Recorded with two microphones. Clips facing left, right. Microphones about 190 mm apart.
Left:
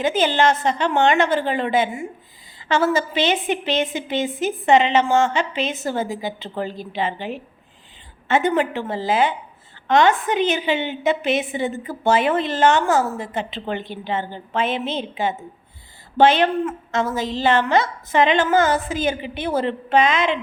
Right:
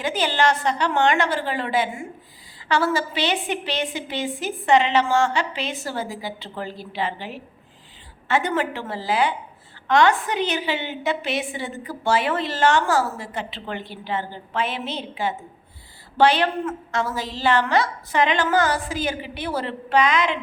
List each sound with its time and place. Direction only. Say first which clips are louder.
0.0 s a woman's voice: left 4 dB; 20° left (ahead or behind)